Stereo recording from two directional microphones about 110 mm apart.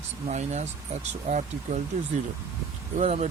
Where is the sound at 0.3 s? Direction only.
90° right.